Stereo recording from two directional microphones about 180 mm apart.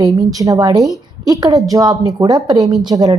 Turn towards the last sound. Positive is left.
turn(degrees=-20)  # may be behind; listen again after turning